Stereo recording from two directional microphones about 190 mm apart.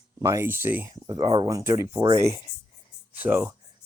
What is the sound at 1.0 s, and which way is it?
Speech, 20° right (ahead or behind).